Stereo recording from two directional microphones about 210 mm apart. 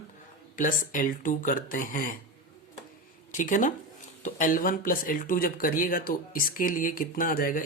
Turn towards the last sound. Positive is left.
turn(degrees=40)  # may be behind; listen again after turning